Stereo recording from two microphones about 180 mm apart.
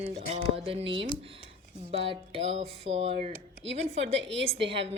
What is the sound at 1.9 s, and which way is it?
Speech, 35° right (ahead or behind).